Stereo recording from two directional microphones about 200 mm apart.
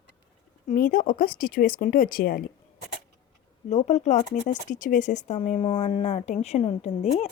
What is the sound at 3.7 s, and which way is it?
Speech, 35° left (ahead or behind).